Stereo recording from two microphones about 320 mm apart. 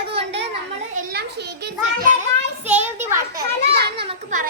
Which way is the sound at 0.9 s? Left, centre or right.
Right.